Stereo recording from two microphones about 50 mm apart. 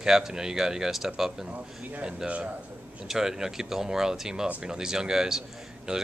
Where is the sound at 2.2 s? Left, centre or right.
Right.